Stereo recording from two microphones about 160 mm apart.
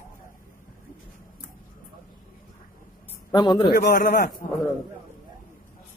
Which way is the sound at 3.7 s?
90° left.